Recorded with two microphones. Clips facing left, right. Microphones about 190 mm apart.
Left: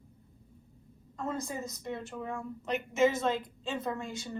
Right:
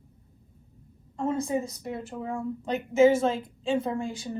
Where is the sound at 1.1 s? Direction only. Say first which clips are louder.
Right 8 dB; 30° right (ahead or behind).